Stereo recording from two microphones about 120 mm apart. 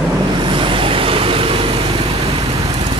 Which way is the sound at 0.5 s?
45° right (ahead or behind).